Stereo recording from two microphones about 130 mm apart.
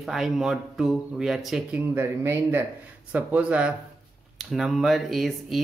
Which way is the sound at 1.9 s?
15° right (ahead or behind).